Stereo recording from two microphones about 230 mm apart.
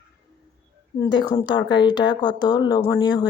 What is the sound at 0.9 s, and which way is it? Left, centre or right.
Speech, centre.